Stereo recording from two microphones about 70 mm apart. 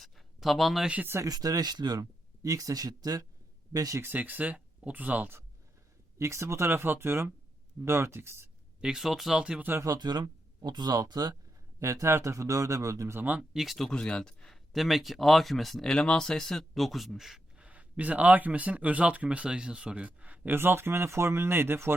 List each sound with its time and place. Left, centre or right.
0.0 s a sound: centre
1.2 s a man's voice: right
4.0 s speech: right
6.1 s a man's voice: right
6.7 s speech: right
8.8 s speech: centre
9.4 s speech: centre
10.0 s speech: right
11.8 s a man's voice: right
13.1 s speech: right
13.5 s speech: centre
17.6 s speech: right